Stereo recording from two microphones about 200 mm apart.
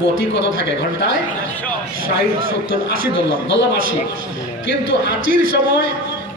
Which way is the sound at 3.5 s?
45° right (ahead or behind).